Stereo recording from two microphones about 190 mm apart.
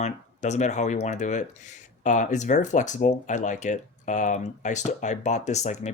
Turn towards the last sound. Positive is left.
turn(degrees=35)  # may be behind; listen again after turning